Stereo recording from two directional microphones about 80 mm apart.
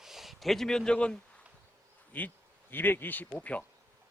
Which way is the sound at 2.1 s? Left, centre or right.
Left.